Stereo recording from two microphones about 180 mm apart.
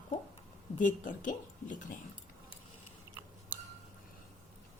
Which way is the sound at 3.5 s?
10° right (ahead or behind).